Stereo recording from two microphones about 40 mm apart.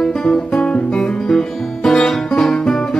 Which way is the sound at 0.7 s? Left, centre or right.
Left.